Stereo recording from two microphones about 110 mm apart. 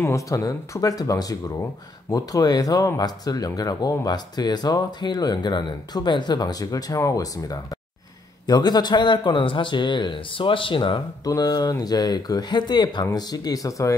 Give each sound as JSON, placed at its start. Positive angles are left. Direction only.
{"t": 0.0, "sound": "a man's voice", "side_deg": 30}
{"t": 11.2, "sound": "speech", "side_deg": 35}